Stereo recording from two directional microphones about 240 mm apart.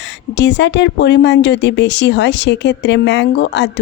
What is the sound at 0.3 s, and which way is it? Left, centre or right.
Speech, left.